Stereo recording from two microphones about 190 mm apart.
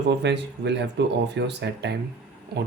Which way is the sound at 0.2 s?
65° right (ahead or behind).